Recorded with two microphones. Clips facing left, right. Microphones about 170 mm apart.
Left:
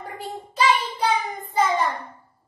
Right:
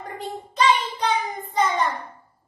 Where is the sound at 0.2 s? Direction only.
5° left (ahead or behind).